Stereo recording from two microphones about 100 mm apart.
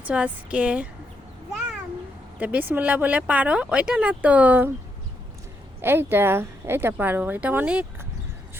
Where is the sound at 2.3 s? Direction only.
15° right (ahead or behind).